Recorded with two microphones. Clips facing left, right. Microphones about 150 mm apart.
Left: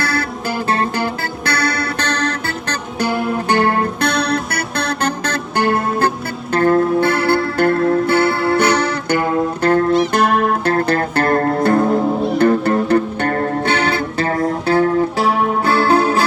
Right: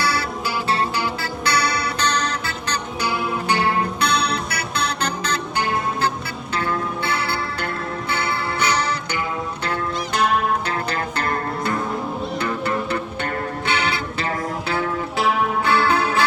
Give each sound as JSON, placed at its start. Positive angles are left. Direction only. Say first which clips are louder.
{"t": 0.0, "sound": "music", "louder": "left 2 dB", "side_deg": 50}